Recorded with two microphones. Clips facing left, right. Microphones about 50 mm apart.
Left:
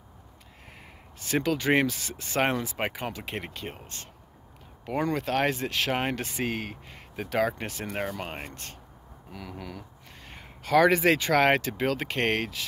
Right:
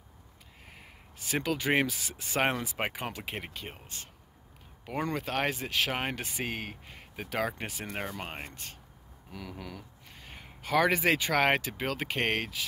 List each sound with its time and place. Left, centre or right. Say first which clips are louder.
1.2 s speech: left 4 dB; centre
3.8 s speech: left 3 dB; centre
7.8 s speech: left 5 dB; centre
8.1 s speech: left 4 dB; centre
9.8 s speech: left 4 dB; centre